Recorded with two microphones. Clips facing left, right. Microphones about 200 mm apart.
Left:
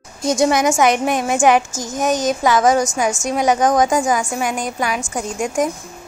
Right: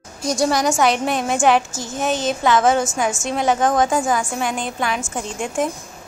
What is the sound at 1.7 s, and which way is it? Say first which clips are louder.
Speech: left 3 dB; 45° left (ahead or behind).